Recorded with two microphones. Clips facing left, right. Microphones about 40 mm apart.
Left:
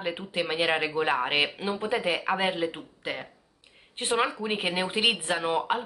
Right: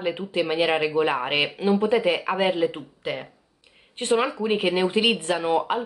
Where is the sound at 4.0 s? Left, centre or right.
Centre.